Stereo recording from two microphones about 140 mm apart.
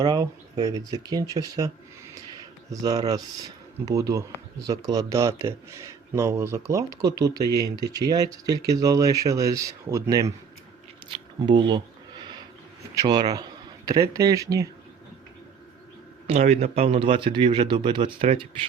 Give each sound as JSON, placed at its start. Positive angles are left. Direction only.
{"t": 0.0, "sound": "speech", "side_deg": -25}
{"t": 11.1, "sound": "camera", "side_deg": -35}
{"t": 13.0, "sound": "speech", "side_deg": -30}
{"t": 16.2, "sound": "a man's voice", "side_deg": -55}